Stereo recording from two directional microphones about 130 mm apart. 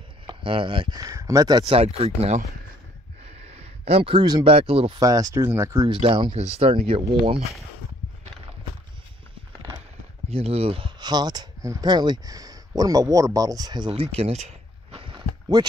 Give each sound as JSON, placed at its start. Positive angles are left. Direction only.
{"t": 0.3, "sound": "speech", "side_deg": -40}
{"t": 1.7, "sound": "speech", "side_deg": -50}
{"t": 3.8, "sound": "speech", "side_deg": -45}
{"t": 4.5, "sound": "speech", "side_deg": -50}
{"t": 4.9, "sound": "speech", "side_deg": -25}
{"t": 5.9, "sound": "speech", "side_deg": -40}
{"t": 10.3, "sound": "speech", "side_deg": -50}
{"t": 14.0, "sound": "a sound", "side_deg": -55}